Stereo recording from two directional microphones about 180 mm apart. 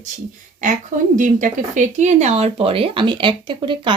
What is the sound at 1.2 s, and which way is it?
Speech, 45° right (ahead or behind).